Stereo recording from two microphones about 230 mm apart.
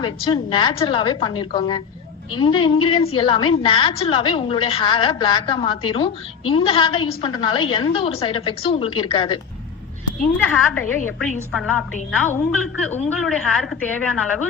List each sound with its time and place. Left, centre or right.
0.0 s a woman's voice: centre
10.3 s a woman's voice: centre